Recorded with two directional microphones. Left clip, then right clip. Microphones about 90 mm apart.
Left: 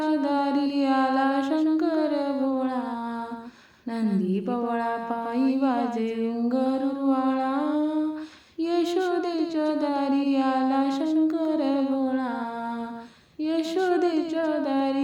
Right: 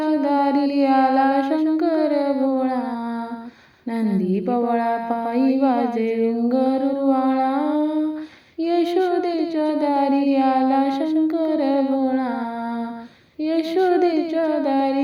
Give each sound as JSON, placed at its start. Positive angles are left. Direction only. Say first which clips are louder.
{"t": 0.0, "sound": "music", "louder": "right 5 dB", "side_deg": -30}
{"t": 3.9, "sound": "mantra", "louder": "right 5 dB", "side_deg": -35}
{"t": 6.5, "sound": "humming", "louder": "right 6 dB", "side_deg": -35}
{"t": 8.6, "sound": "a sound", "louder": "right 5 dB", "side_deg": -30}
{"t": 13.4, "sound": "female singing", "louder": "right 6 dB", "side_deg": -35}